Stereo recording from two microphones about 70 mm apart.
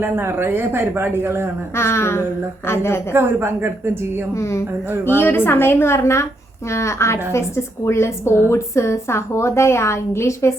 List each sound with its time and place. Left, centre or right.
0.0 s speech: right
1.7 s a woman's voice: left
3.1 s speech: right
4.4 s a woman's voice: left